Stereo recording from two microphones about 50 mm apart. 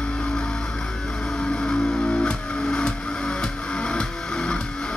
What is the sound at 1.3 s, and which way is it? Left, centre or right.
Music, centre.